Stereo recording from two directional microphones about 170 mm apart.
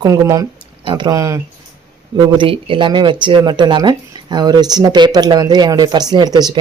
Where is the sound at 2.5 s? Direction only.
30° right (ahead or behind).